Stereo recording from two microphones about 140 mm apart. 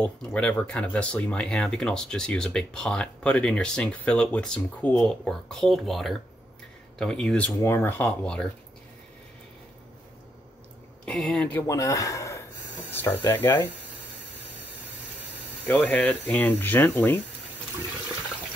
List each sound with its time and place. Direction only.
0.0 s speech: 10° left (ahead or behind)
11.1 s speech: 5° left (ahead or behind)
11.6 s speech: 20° left (ahead or behind)
15.6 s speech: 10° left (ahead or behind)